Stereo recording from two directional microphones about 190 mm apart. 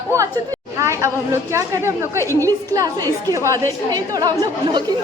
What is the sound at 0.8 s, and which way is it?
A woman's voice, 15° right (ahead or behind).